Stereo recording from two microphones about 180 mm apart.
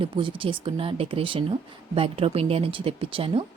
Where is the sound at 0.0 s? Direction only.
30° right (ahead or behind).